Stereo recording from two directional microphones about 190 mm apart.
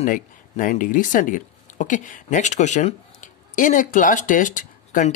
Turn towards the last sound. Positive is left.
turn(degrees=45)  # may be behind; listen again after turning